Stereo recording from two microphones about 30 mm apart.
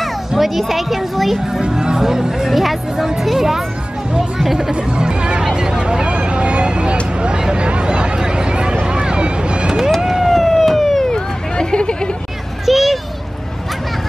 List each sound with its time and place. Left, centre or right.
0.4 s speech: centre
1.4 s speech: centre
2.5 s speech: centre
4.6 s speech: right
6.1 s vehicle: right
7.2 s a sound: right
8.8 s boat: right
10.0 s cat: centre
11.1 s hubbub: left
12.6 s a sound: centre